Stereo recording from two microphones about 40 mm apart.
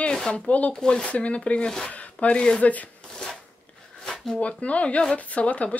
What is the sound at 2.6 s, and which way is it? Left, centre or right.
Speech, left.